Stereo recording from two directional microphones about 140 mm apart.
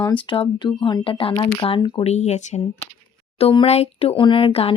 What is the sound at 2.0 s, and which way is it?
Speech, 55° left (ahead or behind).